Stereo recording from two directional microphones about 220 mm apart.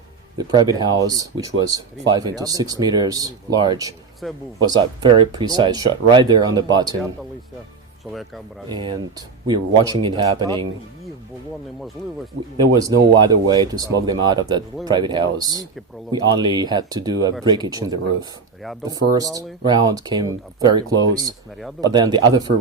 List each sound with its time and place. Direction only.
0.3 s speech: 15° right (ahead or behind)
8.7 s speech: 20° right (ahead or behind)
12.0 s speech: 5° left (ahead or behind)
12.8 s speech: 20° right (ahead or behind)